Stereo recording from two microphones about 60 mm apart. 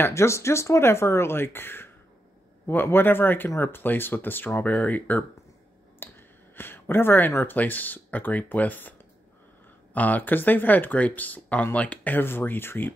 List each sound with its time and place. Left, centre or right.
0.0 s speech: left
9.9 s speech: left